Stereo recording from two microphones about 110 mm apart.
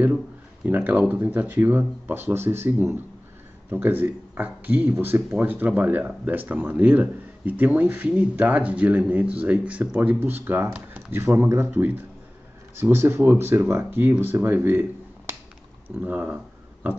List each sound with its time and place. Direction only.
0.7 s speech: 15° right (ahead or behind)